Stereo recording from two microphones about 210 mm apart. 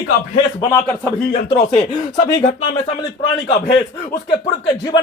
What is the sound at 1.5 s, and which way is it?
Speech, 30° left (ahead or behind).